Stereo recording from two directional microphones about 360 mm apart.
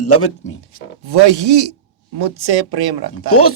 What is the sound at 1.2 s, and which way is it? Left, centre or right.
Speech, right.